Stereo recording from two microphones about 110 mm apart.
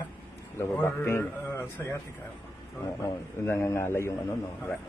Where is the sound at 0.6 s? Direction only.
20° left (ahead or behind).